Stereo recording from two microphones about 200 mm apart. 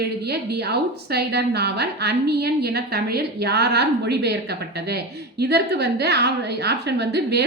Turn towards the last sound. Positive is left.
turn(degrees=-55)  # may be behind; listen again after turning